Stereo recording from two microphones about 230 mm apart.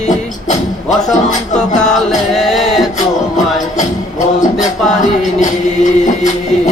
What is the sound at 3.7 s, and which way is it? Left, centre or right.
Music, left.